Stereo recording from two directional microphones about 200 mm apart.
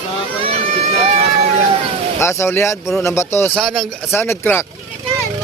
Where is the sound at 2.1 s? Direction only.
15° left (ahead or behind).